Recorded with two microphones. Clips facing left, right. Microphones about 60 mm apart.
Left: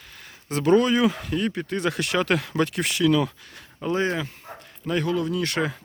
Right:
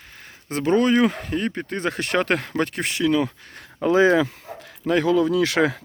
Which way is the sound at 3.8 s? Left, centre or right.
Right.